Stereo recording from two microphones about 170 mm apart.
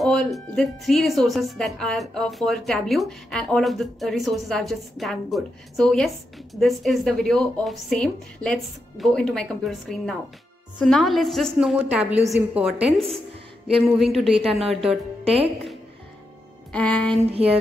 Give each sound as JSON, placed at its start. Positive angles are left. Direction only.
{"t": 0.0, "sound": "speech", "side_deg": 0}
{"t": 16.7, "sound": "music", "side_deg": 5}
{"t": 17.3, "sound": "music", "side_deg": -35}